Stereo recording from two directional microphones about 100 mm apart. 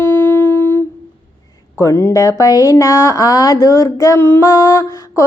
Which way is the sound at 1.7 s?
25° left (ahead or behind).